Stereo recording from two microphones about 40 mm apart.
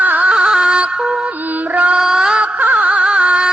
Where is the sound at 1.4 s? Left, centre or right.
Right.